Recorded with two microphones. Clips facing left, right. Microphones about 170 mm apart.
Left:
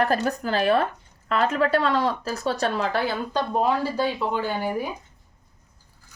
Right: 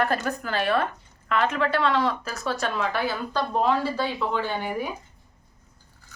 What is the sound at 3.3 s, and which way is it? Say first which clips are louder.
Speech: even; 10° left (ahead or behind).